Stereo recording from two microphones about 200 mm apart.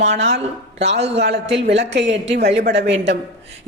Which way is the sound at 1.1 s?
60° right (ahead or behind).